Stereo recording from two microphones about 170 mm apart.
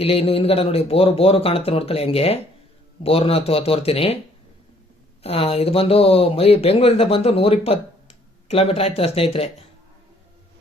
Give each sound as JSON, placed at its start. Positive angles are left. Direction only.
{"t": 0.0, "sound": "speech", "side_deg": 35}
{"t": 5.2, "sound": "speech", "side_deg": 35}